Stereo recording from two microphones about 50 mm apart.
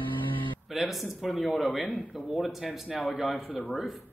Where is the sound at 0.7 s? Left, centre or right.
Centre.